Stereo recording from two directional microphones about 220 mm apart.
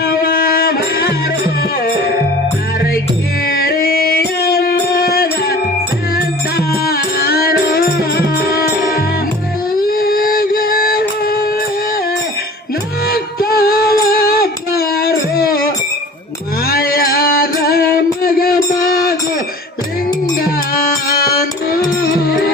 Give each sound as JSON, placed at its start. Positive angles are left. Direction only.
{"t": 0.0, "sound": "music", "side_deg": 45}
{"t": 3.4, "sound": "music", "side_deg": 45}
{"t": 9.8, "sound": "a sound", "side_deg": 40}
{"t": 13.1, "sound": "child singing", "side_deg": 40}
{"t": 16.6, "sound": "music", "side_deg": 45}
{"t": 20.4, "sound": "music", "side_deg": 40}